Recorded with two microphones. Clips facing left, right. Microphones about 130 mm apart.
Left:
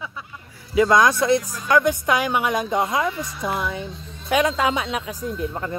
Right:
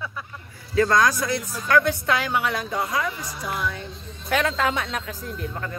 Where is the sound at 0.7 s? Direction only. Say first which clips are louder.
Left 3 dB; 15° left (ahead or behind).